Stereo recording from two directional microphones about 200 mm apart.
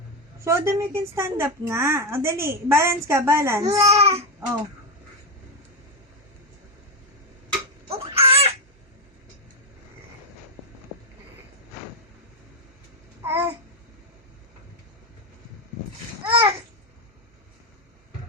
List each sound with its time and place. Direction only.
0.4 s a woman's voice: 15° right (ahead or behind)
3.7 s speech: 30° right (ahead or behind)
7.9 s baby cry: 30° right (ahead or behind)
13.2 s babbling: 10° right (ahead or behind)
16.2 s babbling: 15° right (ahead or behind)